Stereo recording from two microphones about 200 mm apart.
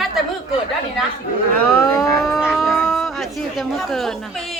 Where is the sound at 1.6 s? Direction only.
15° left (ahead or behind).